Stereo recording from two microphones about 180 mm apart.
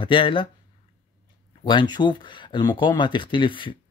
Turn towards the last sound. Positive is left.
turn(degrees=30)  # may be behind; listen again after turning